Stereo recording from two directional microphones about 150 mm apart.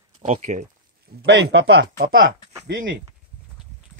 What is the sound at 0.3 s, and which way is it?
Speech, 55° right (ahead or behind).